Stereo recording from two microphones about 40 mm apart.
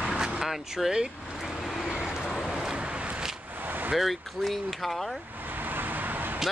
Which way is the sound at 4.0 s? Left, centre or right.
Centre.